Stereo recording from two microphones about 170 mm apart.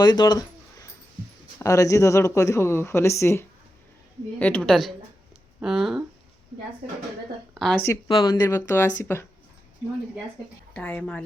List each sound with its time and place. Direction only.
0.0 s a sound: 25° left (ahead or behind)
1.5 s a woman's voice: 20° left (ahead or behind); by 6.1 s 5° right (ahead or behind)
7.5 s speech: centre (ahead or behind)
8.0 s speech: 25° left (ahead or behind)
10.8 s speech: 10° left (ahead or behind)